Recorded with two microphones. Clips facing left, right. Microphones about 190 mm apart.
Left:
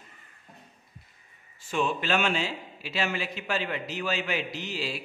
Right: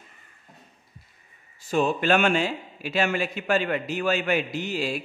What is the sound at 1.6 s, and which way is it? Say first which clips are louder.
Speech: right 5 dB; 40° right (ahead or behind).